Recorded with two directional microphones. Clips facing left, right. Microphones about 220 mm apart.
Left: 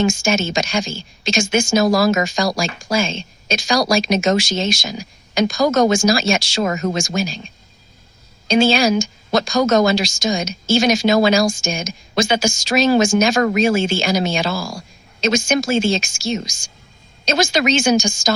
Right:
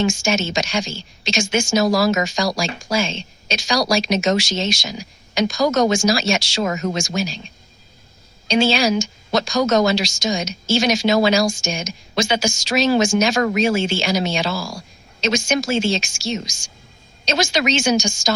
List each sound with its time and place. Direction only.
0.0 s a woman's voice: 50° left (ahead or behind)
8.4 s a woman's voice: 50° left (ahead or behind)